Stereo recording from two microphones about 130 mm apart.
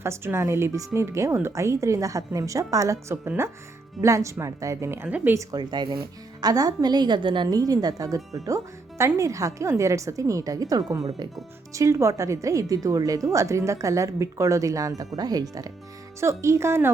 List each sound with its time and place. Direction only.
0.0 s speech: 20° right (ahead or behind); by 7.4 s 40° right (ahead or behind)
7.4 s speech: 30° right (ahead or behind)